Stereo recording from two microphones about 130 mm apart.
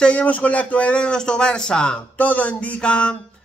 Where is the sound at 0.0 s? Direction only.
10° left (ahead or behind).